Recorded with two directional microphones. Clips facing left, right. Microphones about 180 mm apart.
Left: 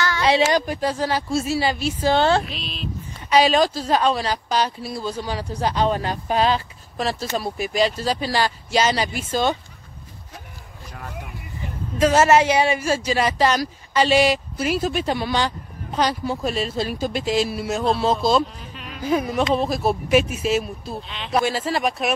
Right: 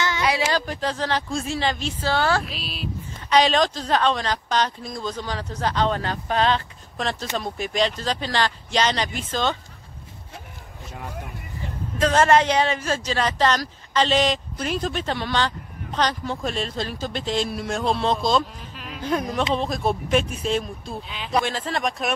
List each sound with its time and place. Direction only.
0.2 s a sound: 25° left (ahead or behind)
0.6 s speech: 10° left (ahead or behind)
2.1 s speech: 25° left (ahead or behind)
2.4 s speech: 5° right (ahead or behind)
3.3 s speech: 5° left (ahead or behind)
12.0 s speech: 10° left (ahead or behind)